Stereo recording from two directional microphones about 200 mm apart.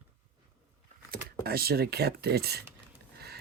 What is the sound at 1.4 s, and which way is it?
Speech, 50° right (ahead or behind).